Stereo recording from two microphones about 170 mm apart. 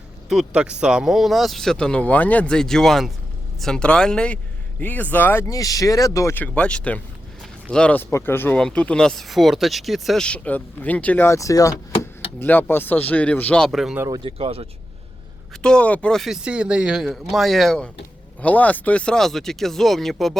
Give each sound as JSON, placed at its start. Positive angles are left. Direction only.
{"t": 0.3, "sound": "speech", "side_deg": -5}
{"t": 14.2, "sound": "speech", "side_deg": -35}
{"t": 15.6, "sound": "speech", "side_deg": 5}